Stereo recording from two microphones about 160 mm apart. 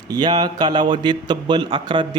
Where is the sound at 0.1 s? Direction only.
25° right (ahead or behind).